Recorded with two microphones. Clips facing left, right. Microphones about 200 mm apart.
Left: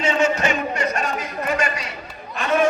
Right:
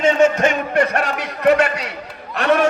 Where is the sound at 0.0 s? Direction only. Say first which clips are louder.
Right 5 dB; 50° right (ahead or behind).